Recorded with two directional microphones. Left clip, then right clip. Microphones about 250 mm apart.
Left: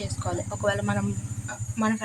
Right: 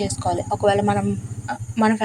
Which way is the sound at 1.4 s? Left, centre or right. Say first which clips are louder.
Right 8 dB; right.